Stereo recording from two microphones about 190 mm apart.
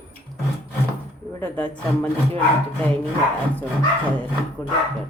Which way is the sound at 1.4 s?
10° left (ahead or behind).